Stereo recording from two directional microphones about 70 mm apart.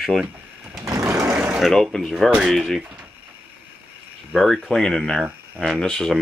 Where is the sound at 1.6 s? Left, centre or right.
Centre.